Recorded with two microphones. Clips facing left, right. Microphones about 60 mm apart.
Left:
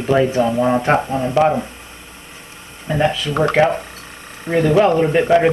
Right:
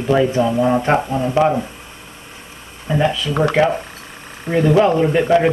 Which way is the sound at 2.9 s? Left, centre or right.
Centre.